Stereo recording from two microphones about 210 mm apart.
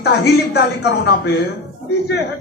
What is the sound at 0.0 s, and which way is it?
A man's voice, 50° left (ahead or behind).